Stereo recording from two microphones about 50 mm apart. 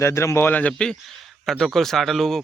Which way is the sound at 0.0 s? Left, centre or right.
Left.